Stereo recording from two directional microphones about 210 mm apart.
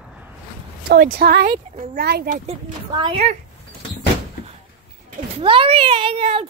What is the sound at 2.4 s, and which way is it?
Speech, 25° right (ahead or behind).